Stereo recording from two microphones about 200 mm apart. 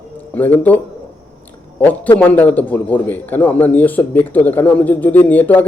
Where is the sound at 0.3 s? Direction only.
10° left (ahead or behind).